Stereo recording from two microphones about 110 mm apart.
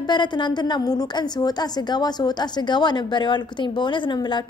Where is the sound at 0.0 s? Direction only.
40° left (ahead or behind).